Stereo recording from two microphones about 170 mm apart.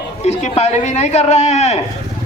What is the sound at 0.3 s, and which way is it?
A man's voice, 40° left (ahead or behind).